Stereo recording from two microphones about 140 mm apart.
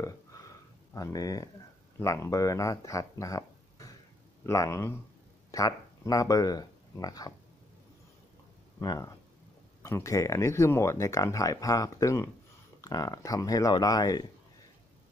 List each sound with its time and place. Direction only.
0.0 s a sound: 25° left (ahead or behind)
0.9 s speech: 25° left (ahead or behind)
8.7 s speech: 25° left (ahead or behind)